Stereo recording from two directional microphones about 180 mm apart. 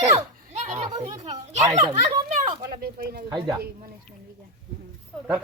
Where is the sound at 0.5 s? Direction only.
40° right (ahead or behind).